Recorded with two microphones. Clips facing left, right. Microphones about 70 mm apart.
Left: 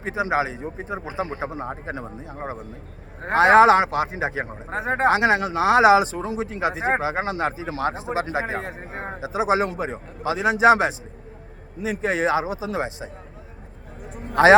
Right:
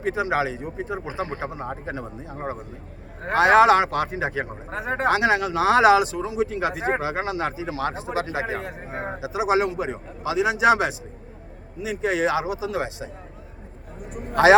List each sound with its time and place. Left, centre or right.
0.0 s speech: left
3.2 s speech: left